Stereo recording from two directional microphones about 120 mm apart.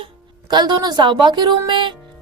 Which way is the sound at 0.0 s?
40° right (ahead or behind).